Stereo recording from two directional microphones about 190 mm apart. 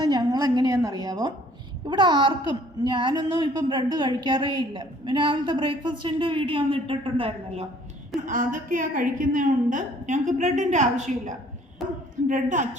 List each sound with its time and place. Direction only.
0.0 s a woman's voice: 20° right (ahead or behind)
8.3 s a woman's voice: 45° right (ahead or behind)